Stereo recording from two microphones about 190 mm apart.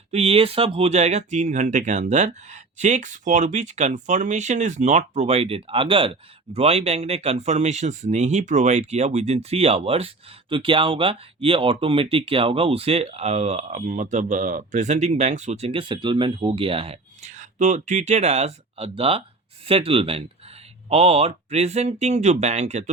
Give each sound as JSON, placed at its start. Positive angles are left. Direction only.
{"t": 0.1, "sound": "speech", "side_deg": -30}